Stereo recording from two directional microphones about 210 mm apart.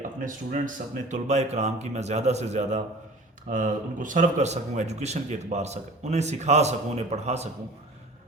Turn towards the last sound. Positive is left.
turn(degrees=-30)  # may be behind; listen again after turning